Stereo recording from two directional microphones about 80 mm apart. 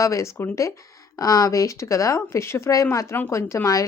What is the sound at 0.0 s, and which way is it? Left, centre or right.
A woman's voice, left.